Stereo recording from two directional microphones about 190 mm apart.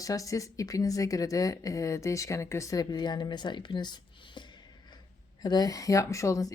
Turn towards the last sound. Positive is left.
turn(degrees=15)  # may be behind; listen again after turning